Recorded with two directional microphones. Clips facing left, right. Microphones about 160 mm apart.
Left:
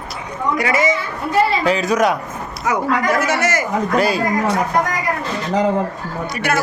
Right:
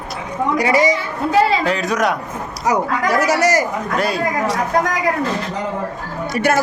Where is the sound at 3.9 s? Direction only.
Centre (ahead or behind).